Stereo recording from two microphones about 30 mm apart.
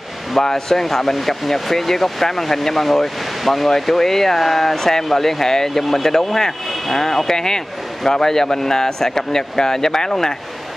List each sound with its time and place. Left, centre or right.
0.4 s speech: centre